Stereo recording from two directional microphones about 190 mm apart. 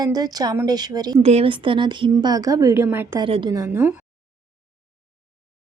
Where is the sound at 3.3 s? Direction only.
25° right (ahead or behind).